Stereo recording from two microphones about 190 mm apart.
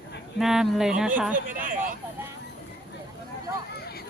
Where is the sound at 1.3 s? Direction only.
45° right (ahead or behind).